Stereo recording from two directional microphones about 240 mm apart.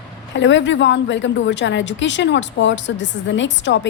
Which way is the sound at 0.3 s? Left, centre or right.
Left.